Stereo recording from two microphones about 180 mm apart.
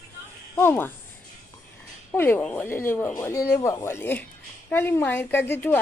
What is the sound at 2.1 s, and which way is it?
A woman's voice, 10° left (ahead or behind).